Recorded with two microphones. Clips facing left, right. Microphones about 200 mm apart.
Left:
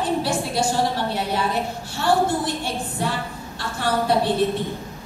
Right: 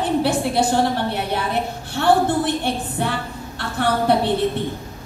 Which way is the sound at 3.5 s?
60° right (ahead or behind).